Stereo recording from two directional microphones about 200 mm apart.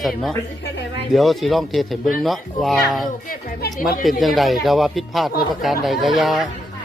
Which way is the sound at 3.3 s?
45° left (ahead or behind).